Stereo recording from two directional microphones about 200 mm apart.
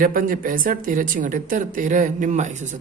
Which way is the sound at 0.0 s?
45° right (ahead or behind).